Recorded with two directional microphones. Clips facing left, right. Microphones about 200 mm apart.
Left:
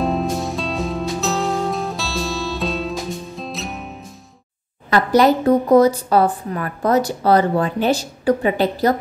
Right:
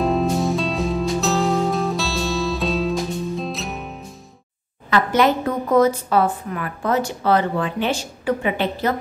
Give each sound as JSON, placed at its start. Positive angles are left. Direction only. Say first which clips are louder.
{"t": 0.0, "sound": "music", "louder": "right 2 dB", "side_deg": 0}
{"t": 4.8, "sound": "a woman's voice", "louder": "left 3 dB", "side_deg": 35}